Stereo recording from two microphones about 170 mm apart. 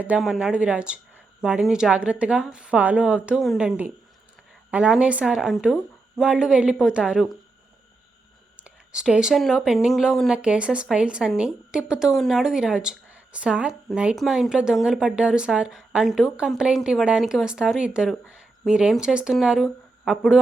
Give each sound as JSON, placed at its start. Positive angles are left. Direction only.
{"t": 0.0, "sound": "speech", "side_deg": -5}
{"t": 8.6, "sound": "speech", "side_deg": -5}